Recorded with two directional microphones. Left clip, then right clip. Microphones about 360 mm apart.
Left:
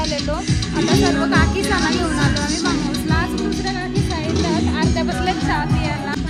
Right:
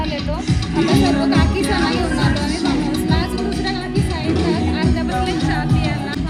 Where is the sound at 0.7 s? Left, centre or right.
Centre.